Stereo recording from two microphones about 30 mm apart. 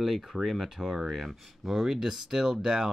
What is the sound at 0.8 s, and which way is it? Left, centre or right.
Speech, centre.